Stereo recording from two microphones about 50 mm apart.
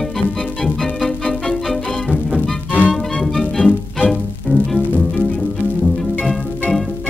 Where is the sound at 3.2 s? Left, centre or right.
Centre.